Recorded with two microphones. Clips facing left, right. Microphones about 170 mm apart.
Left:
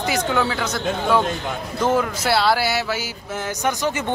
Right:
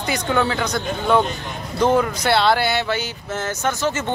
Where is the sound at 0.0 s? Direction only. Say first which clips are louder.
Even; 5° left (ahead or behind).